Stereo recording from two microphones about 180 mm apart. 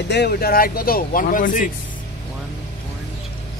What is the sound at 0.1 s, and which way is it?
Speech, 65° left (ahead or behind).